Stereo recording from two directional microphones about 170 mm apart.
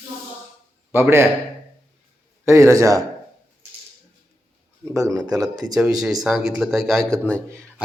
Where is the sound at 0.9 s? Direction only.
15° right (ahead or behind).